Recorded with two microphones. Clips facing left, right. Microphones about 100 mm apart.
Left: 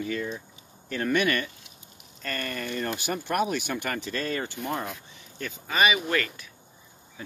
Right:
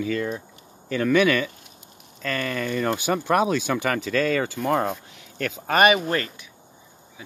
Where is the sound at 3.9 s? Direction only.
90° right; by 6.0 s 55° right (ahead or behind).